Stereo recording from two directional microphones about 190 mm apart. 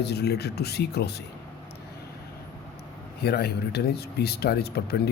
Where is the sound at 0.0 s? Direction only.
60° left (ahead or behind).